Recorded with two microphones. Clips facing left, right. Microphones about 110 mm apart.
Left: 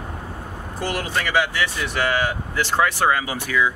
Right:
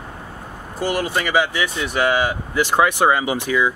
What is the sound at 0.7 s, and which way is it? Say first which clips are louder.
Speech: right 4 dB; 5° right (ahead or behind).